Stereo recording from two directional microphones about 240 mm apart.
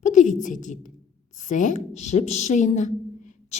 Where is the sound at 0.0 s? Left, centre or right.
Left.